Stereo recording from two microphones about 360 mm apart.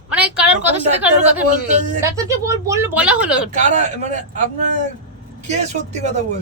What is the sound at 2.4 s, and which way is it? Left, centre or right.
Speech, centre.